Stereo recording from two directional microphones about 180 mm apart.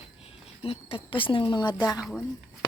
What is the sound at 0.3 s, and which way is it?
Speech, 30° left (ahead or behind).